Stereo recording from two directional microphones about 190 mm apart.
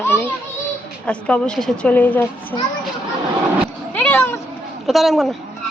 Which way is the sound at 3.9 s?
10° left (ahead or behind).